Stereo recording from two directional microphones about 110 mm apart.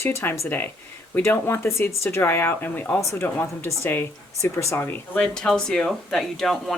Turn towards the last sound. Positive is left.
turn(degrees=0)  # may be behind; listen again after turning